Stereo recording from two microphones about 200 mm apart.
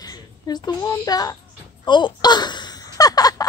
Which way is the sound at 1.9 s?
25° left (ahead or behind).